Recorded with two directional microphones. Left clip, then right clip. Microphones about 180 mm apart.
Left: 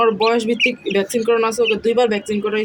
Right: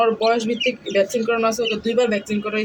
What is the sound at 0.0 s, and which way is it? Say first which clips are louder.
Speech: left 2 dB; 55° left (ahead or behind).